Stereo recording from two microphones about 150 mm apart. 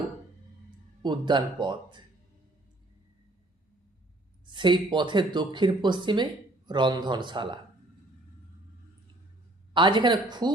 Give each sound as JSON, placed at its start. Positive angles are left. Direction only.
{"t": 1.0, "sound": "speech", "side_deg": -30}
{"t": 4.4, "sound": "speech", "side_deg": -30}
{"t": 9.7, "sound": "speech", "side_deg": -30}